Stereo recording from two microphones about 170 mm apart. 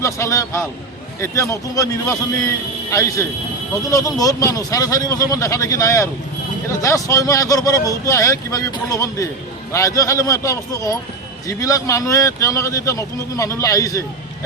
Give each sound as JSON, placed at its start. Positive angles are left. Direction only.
{"t": 0.0, "sound": "a man's voice", "side_deg": 15}